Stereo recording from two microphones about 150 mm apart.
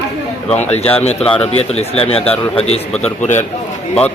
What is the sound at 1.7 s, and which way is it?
Speech, 45° left (ahead or behind).